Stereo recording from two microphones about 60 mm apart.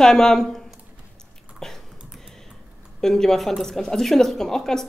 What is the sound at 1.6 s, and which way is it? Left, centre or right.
Dog, centre.